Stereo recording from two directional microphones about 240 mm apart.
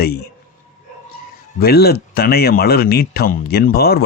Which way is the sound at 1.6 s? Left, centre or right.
Left.